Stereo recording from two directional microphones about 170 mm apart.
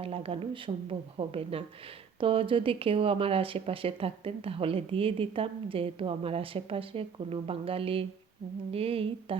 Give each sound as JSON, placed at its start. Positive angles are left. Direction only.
{"t": 0.0, "sound": "speech", "side_deg": -35}